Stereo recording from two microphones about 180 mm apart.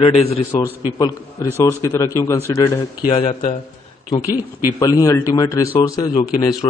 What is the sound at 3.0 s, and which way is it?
Speech, 30° left (ahead or behind).